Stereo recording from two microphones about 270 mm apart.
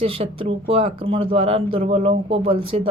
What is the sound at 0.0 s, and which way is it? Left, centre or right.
Speech, right.